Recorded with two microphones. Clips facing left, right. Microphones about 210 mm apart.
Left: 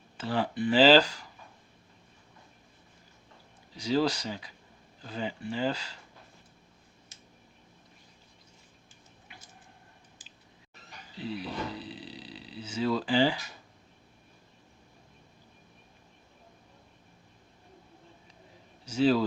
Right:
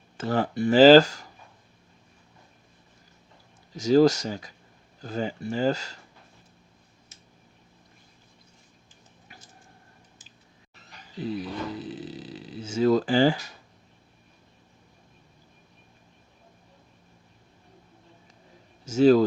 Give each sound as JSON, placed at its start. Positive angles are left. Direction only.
{"t": 0.2, "sound": "speech", "side_deg": -45}
{"t": 3.8, "sound": "speech", "side_deg": -45}
{"t": 11.2, "sound": "a sound", "side_deg": -45}
{"t": 18.9, "sound": "speech", "side_deg": -45}